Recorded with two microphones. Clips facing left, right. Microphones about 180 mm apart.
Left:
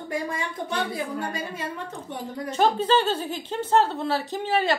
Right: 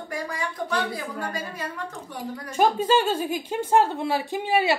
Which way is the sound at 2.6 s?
10° right (ahead or behind).